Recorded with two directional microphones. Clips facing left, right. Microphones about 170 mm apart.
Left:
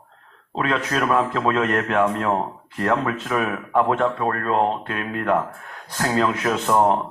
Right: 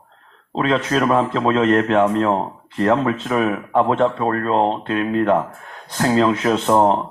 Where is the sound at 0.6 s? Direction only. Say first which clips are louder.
Right 4 dB; 30° right (ahead or behind).